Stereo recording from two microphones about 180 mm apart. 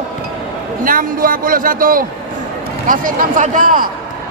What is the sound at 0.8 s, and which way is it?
A man's voice, 50° right (ahead or behind).